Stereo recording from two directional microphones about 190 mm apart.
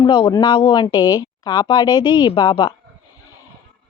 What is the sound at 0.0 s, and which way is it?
A woman's voice, 25° left (ahead or behind).